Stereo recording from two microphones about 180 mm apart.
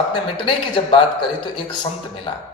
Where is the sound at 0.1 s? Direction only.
25° left (ahead or behind).